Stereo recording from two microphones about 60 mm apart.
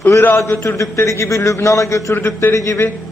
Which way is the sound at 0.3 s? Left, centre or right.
Left.